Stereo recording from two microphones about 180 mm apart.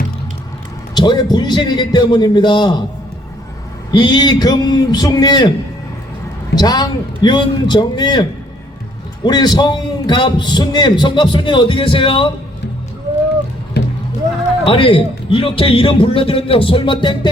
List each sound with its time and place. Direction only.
0.9 s a man's voice: 25° left (ahead or behind)
3.9 s a man's voice: 25° left (ahead or behind)
6.6 s a man's voice: 20° left (ahead or behind)
9.2 s a man's voice: 25° left (ahead or behind)
14.6 s a man's voice: 30° left (ahead or behind)